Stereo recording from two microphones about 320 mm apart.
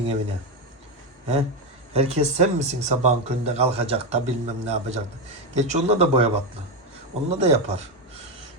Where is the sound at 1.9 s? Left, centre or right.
Centre.